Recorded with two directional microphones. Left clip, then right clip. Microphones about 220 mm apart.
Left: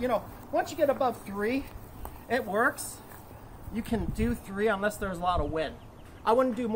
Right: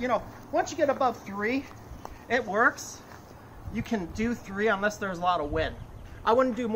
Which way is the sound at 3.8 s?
Centre (ahead or behind).